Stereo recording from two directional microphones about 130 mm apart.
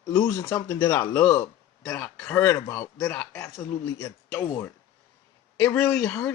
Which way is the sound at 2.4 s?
25° left (ahead or behind).